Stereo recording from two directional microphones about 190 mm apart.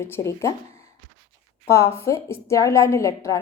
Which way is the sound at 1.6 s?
15° left (ahead or behind).